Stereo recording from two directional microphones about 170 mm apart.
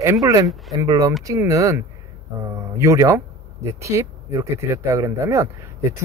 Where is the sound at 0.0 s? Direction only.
20° right (ahead or behind).